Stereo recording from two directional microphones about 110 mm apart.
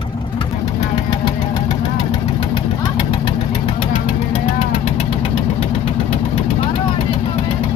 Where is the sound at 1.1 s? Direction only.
45° left (ahead or behind).